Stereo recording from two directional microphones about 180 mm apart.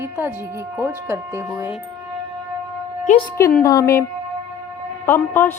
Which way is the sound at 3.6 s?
15° left (ahead or behind).